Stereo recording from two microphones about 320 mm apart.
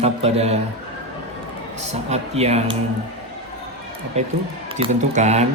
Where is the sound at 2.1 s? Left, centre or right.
Centre.